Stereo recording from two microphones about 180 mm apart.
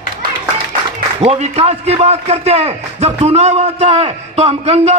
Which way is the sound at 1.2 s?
35° right (ahead or behind).